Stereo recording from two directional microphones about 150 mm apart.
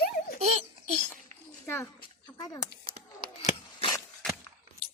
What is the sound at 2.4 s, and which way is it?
Speech, 25° left (ahead or behind).